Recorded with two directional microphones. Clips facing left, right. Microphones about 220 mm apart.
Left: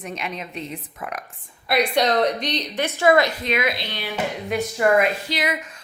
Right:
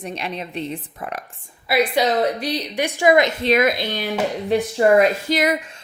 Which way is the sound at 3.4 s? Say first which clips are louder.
Right 6 dB; 45° right (ahead or behind).